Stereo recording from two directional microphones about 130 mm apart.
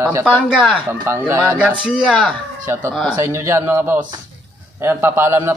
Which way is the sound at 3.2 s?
20° right (ahead or behind).